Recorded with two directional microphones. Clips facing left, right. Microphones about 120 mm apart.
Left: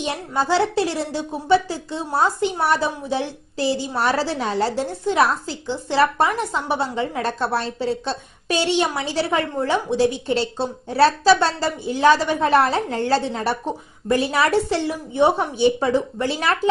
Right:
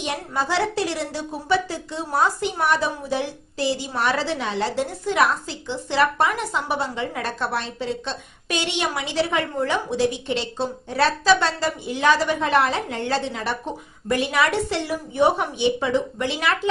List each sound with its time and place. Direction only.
0.0 s a woman's voice: 30° left (ahead or behind)
15.6 s a woman's voice: 40° left (ahead or behind)